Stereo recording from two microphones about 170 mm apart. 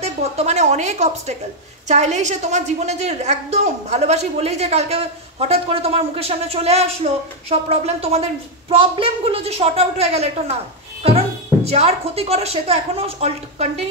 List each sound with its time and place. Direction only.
0.0 s a woman's voice: 40° right (ahead or behind)